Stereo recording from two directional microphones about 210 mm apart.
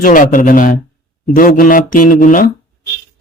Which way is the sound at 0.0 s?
40° left (ahead or behind).